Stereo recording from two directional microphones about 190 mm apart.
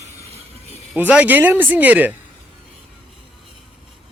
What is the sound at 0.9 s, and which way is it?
Speech, 10° right (ahead or behind).